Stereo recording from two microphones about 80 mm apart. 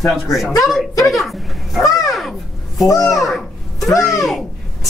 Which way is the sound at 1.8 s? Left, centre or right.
Left.